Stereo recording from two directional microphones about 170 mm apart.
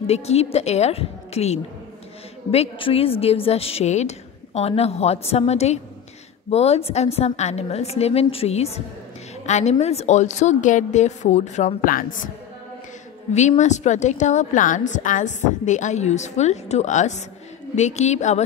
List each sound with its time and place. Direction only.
0.0 s a woman's voice: 40° left (ahead or behind)
13.3 s a woman's voice: 45° left (ahead or behind)